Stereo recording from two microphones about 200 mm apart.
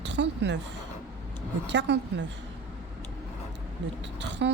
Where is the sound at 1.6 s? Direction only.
60° right (ahead or behind).